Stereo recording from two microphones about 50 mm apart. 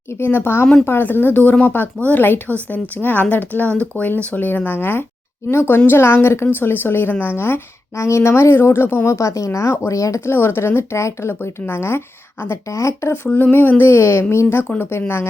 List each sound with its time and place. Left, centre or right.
0.2 s speech: left
7.9 s a woman's voice: left
9.0 s speech: left
10.2 s speech: left
10.9 s speech: left
11.7 s speech: left
12.6 s speech: left
13.3 s speech: left